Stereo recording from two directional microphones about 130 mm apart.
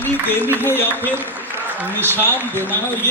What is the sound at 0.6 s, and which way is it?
Speech, 15° left (ahead or behind).